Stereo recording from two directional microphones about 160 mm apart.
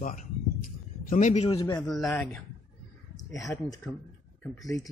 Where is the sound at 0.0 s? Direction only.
60° left (ahead or behind).